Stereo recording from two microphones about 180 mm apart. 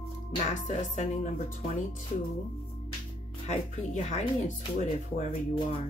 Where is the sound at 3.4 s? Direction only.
40° left (ahead or behind).